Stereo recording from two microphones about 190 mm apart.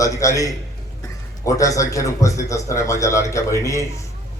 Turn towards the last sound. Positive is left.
turn(degrees=15)  # may be behind; listen again after turning